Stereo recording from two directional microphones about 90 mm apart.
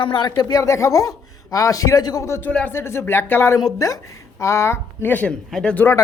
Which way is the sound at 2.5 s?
15° left (ahead or behind).